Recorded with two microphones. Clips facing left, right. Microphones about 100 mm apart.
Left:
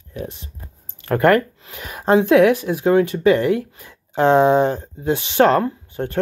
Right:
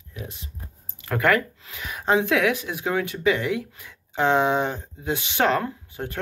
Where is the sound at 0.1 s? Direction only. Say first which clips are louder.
Left 8 dB; 35° left (ahead or behind).